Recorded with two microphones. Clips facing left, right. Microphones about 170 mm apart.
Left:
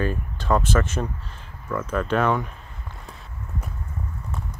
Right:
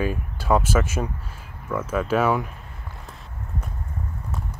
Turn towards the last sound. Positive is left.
turn(degrees=0)  # may be behind; listen again after turning